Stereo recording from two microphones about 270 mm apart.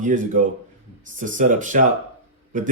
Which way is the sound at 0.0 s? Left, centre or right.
Right.